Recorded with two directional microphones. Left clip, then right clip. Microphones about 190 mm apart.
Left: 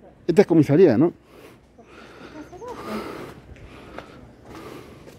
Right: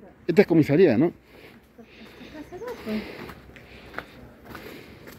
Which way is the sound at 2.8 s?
40° left (ahead or behind).